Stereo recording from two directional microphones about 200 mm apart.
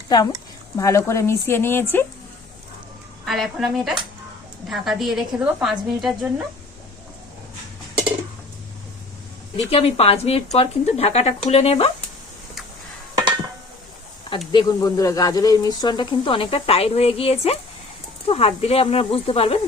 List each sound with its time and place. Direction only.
0.8 s speech: 15° left (ahead or behind)
3.2 s a woman's voice: centre (ahead or behind)
9.6 s speech: 30° left (ahead or behind)
13.1 s a sound: 20° right (ahead or behind)
14.3 s speech: 25° left (ahead or behind)